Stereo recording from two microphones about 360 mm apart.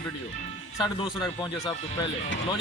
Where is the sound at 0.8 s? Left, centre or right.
Centre.